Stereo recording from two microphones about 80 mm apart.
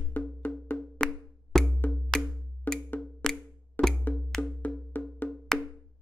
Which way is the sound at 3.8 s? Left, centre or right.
Left.